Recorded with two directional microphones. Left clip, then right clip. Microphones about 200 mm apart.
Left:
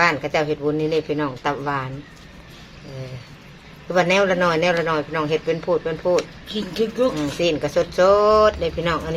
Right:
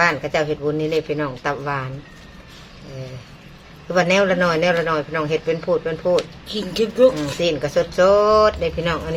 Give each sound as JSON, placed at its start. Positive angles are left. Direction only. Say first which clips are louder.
{"t": 0.0, "sound": "a man's voice", "louder": "even", "side_deg": 0}
{"t": 3.8, "sound": "a man's voice", "louder": "right 1 dB", "side_deg": 0}
{"t": 6.8, "sound": "speech", "louder": "right 1 dB", "side_deg": -40}
{"t": 7.2, "sound": "a man's voice", "louder": "even", "side_deg": 5}